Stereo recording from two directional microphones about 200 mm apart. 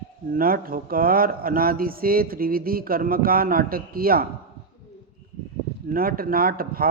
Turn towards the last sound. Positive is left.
turn(degrees=-45)  # may be behind; listen again after turning